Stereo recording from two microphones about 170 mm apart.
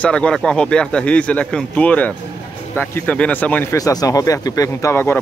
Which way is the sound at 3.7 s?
20° left (ahead or behind).